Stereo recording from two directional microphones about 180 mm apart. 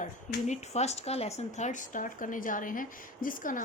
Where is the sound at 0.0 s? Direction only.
40° left (ahead or behind).